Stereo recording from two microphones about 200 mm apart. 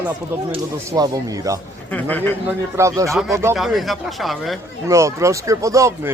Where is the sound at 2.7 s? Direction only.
15° right (ahead or behind).